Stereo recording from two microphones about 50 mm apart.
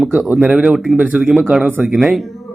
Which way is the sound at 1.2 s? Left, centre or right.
Centre.